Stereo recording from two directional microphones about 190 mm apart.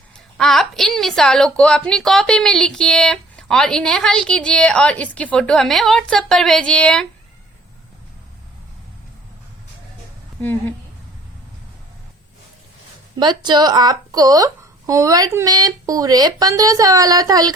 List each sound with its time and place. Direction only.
0.3 s a woman's voice: 5° left (ahead or behind)
10.4 s a woman's voice: 10° left (ahead or behind)
13.1 s speech: 25° right (ahead or behind)